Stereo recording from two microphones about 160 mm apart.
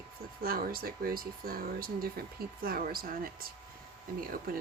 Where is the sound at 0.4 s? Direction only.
65° right (ahead or behind).